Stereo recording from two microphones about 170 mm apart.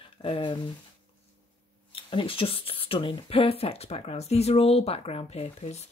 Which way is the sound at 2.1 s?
30° left (ahead or behind).